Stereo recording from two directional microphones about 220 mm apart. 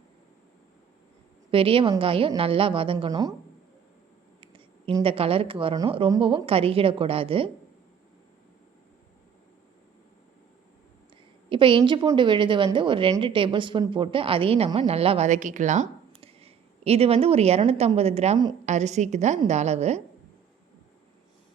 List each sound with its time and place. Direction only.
1.5 s a woman's voice: 25° right (ahead or behind)
4.4 s a woman's voice: 25° right (ahead or behind)
11.4 s a woman's voice: 25° right (ahead or behind)